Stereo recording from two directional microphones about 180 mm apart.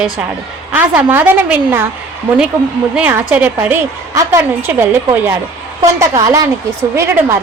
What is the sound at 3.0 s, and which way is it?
A woman's voice, 10° right (ahead or behind).